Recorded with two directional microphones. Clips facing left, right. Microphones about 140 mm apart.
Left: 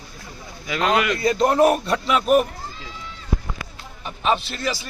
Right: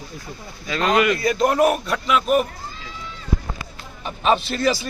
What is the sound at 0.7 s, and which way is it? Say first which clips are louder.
Speech: right 2 dB; 5° left (ahead or behind).